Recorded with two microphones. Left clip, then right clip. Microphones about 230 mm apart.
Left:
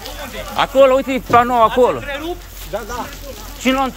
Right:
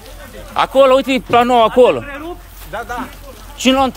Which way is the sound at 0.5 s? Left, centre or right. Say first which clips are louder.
Right 1 dB; right.